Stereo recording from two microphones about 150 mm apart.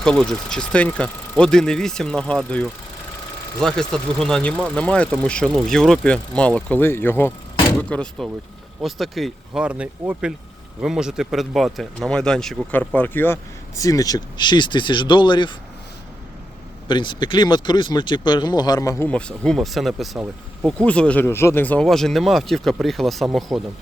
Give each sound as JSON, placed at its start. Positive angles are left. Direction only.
{"t": 0.0, "sound": "speech", "side_deg": 5}
{"t": 16.9, "sound": "speech", "side_deg": 30}
{"t": 19.0, "sound": "speech", "side_deg": 5}